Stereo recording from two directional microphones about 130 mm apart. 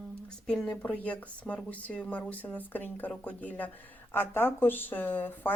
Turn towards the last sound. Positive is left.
turn(degrees=15)  # may be behind; listen again after turning